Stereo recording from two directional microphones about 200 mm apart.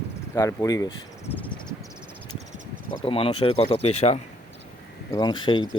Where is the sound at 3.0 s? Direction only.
25° left (ahead or behind).